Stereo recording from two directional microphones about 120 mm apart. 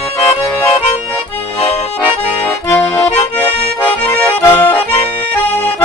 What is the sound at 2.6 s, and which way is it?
Accordion, 20° left (ahead or behind).